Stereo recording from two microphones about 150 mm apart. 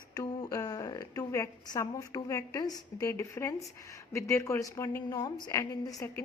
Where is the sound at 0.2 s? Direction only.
25° left (ahead or behind).